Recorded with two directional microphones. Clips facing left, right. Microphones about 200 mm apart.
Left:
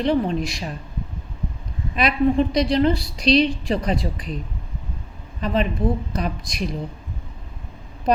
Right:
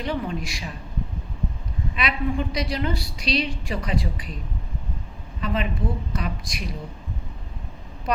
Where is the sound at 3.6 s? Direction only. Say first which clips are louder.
Left 5 dB; 35° left (ahead or behind).